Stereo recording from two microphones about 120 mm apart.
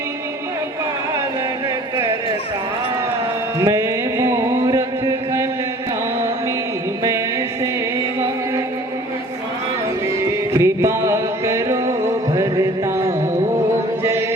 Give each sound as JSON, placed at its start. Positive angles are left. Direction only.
{"t": 3.6, "sound": "music", "side_deg": -25}
{"t": 7.0, "sound": "music", "side_deg": -25}
{"t": 10.1, "sound": "music", "side_deg": -25}
{"t": 14.0, "sound": "chant", "side_deg": -20}